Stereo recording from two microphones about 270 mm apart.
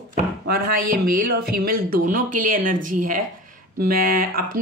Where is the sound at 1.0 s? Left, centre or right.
Right.